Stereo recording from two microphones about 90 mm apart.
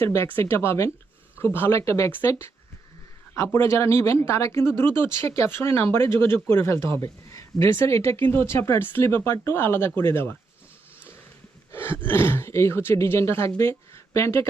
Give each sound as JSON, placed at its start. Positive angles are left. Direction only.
{"t": 0.0, "sound": "speech", "side_deg": 30}
{"t": 3.3, "sound": "speech", "side_deg": 30}
{"t": 11.7, "sound": "speech", "side_deg": 25}